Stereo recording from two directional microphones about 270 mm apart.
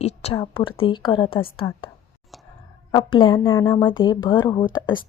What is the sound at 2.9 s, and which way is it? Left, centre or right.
A woman's voice, centre.